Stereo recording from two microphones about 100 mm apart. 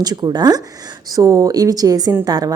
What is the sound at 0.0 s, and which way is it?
A woman's voice, 45° right (ahead or behind).